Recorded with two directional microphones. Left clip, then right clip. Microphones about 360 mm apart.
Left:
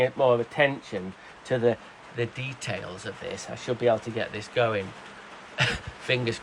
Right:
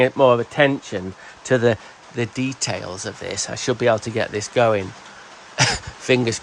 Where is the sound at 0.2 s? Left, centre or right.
Right.